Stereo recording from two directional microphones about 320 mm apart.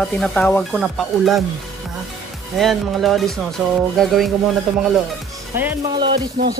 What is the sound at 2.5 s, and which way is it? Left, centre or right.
Speech, centre.